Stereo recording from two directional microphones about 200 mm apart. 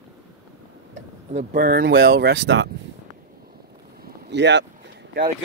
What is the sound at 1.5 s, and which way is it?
Speech, 45° right (ahead or behind).